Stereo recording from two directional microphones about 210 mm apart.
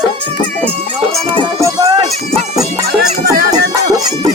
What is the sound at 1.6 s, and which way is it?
Run, 15° right (ahead or behind).